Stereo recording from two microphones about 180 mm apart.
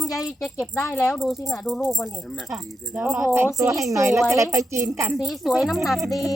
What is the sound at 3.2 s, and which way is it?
A woman's voice, 15° right (ahead or behind).